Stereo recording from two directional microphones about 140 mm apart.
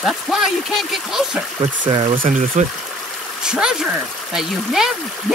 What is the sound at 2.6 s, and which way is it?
Speech, 60° right (ahead or behind).